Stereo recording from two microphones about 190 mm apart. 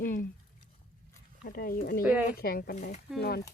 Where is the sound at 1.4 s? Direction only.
50° left (ahead or behind).